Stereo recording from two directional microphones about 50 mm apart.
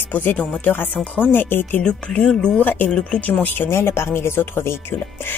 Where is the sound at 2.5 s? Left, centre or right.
Left.